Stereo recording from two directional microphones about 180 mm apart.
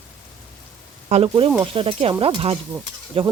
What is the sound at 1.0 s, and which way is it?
Speech, 30° right (ahead or behind).